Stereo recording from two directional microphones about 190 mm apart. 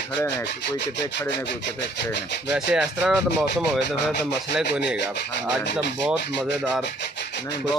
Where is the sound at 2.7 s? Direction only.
5° right (ahead or behind).